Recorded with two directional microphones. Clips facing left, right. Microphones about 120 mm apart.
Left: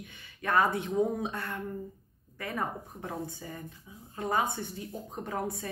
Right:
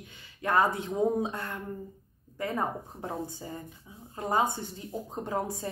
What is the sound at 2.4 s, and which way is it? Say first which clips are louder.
A woman's voice: right 3 dB; 25° right (ahead or behind).